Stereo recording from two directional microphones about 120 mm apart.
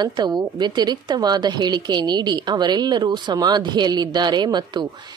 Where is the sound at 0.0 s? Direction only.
35° right (ahead or behind).